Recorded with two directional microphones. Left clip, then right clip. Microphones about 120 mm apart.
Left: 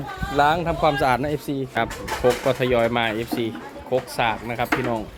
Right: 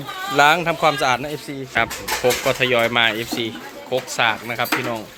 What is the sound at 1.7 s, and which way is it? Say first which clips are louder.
Speech: right 6 dB; 20° left (ahead or behind).